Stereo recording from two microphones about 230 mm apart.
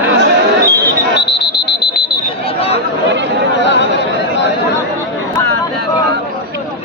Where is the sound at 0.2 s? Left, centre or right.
Right.